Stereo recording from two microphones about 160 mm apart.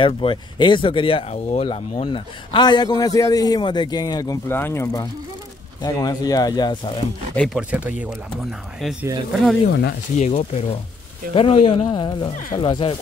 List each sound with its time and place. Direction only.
0.0 s a man's voice: 30° left (ahead or behind)
7.3 s speech: centre (ahead or behind)
10.1 s speech: 45° left (ahead or behind); by 12.9 s 30° left (ahead or behind)